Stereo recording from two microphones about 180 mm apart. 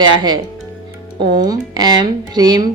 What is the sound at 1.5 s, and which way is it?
A man's voice, 20° right (ahead or behind).